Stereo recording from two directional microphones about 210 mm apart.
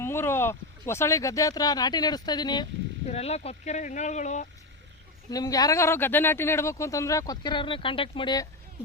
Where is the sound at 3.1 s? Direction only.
30° left (ahead or behind).